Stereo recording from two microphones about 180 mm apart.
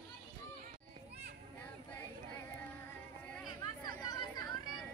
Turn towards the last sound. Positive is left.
turn(degrees=20)  # may be behind; listen again after turning